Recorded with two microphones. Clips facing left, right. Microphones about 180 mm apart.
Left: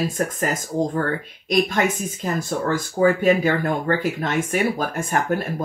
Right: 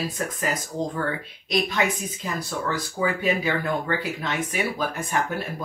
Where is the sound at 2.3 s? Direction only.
50° left (ahead or behind).